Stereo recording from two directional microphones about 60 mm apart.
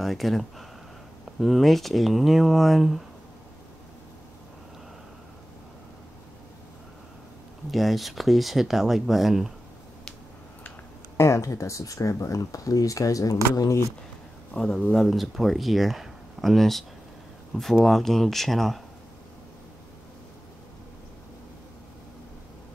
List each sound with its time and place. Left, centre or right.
0.0 s speech: centre
7.7 s speech: centre
11.1 s speech: left
14.5 s speech: left
14.9 s speech: centre